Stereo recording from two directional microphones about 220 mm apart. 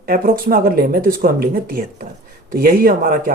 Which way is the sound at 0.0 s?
40° right (ahead or behind).